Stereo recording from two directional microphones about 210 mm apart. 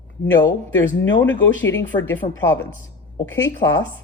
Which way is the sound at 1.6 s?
10° left (ahead or behind).